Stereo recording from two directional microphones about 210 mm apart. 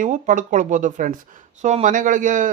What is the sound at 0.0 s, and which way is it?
Speech, 40° right (ahead or behind).